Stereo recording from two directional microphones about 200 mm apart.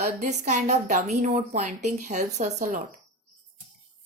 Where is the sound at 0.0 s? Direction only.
35° right (ahead or behind).